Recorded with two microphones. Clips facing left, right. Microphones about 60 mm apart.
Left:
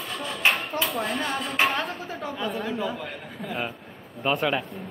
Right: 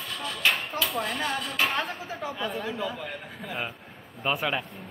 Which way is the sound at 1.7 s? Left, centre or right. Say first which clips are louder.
Left 1 dB; centre.